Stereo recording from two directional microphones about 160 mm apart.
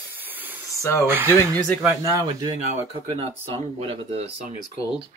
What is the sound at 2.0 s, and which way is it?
Speech, 25° right (ahead or behind).